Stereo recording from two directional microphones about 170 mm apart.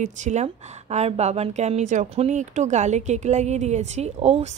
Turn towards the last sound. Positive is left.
turn(degrees=-40)  # may be behind; listen again after turning